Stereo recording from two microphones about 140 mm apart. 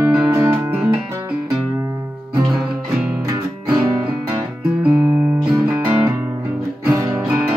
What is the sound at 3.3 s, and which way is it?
Music, 30° right (ahead or behind).